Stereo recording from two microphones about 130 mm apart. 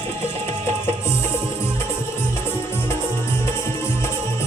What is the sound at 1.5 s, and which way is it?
Music, 20° left (ahead or behind).